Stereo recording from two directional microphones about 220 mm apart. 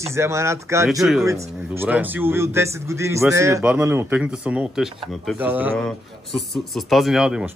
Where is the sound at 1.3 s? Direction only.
10° right (ahead or behind).